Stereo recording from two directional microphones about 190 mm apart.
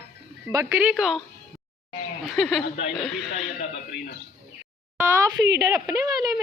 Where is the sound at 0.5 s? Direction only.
10° right (ahead or behind).